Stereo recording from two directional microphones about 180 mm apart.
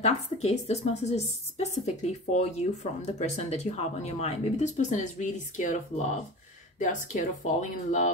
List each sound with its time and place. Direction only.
0.0 s a woman's voice: 35° left (ahead or behind)
6.8 s speech: 45° left (ahead or behind)